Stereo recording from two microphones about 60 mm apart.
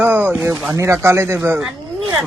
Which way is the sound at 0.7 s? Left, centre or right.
Right.